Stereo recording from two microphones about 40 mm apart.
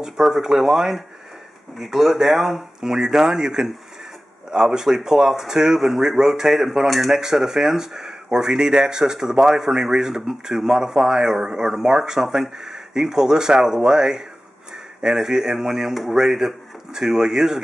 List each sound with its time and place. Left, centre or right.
0.0 s speech: centre
2.9 s speech: centre
7.2 s speech: centre
15.9 s speech: centre